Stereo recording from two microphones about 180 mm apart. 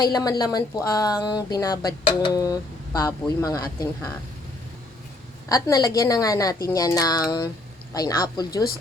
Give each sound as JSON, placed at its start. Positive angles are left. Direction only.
{"t": 0.0, "sound": "speech", "side_deg": 20}
{"t": 5.5, "sound": "speech", "side_deg": 20}